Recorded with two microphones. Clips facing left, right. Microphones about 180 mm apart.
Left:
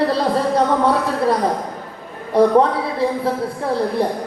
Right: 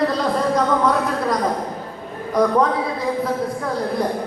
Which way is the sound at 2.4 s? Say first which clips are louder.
Left 4 dB; 30° left (ahead or behind).